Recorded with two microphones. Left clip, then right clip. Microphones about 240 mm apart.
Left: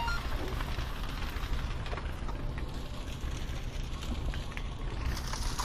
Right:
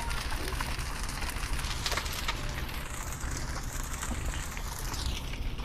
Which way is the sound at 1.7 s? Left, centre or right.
Right.